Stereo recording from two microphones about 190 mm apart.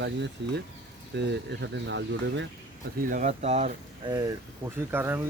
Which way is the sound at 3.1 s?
40° right (ahead or behind).